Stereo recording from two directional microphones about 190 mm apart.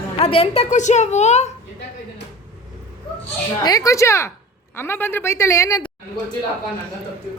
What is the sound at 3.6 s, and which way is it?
A woman's voice, 20° left (ahead or behind).